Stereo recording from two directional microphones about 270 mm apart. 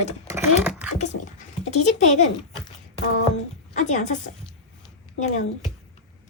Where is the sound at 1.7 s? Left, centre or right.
Left.